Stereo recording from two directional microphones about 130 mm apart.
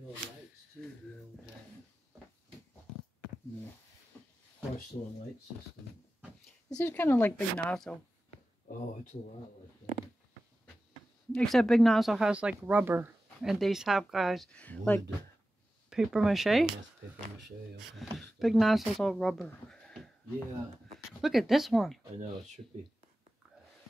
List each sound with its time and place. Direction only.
0.8 s a sound: 5° left (ahead or behind)
4.1 s a sound: 15° left (ahead or behind)
4.9 s speech: 45° left (ahead or behind)
6.8 s speech: 15° left (ahead or behind)
11.3 s speech: centre (ahead or behind); by 13.1 s 15° right (ahead or behind)
13.4 s speech: centre (ahead or behind)
14.6 s speech: 10° left (ahead or behind)
15.9 s speech: 5° right (ahead or behind)
18.1 s speech: centre (ahead or behind)
19.4 s a sound: 5° left (ahead or behind)
21.2 s speech: centre (ahead or behind)